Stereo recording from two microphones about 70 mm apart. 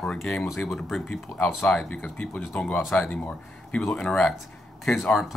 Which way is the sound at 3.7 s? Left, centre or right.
Centre.